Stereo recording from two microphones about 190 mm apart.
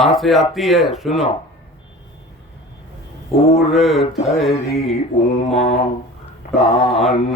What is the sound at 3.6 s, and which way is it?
Speech, centre (ahead or behind).